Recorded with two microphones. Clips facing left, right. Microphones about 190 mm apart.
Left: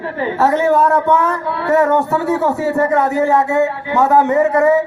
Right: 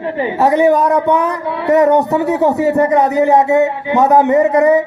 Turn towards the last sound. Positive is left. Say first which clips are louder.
# right 2 dB
turn(degrees=-15)  # may be behind; listen again after turning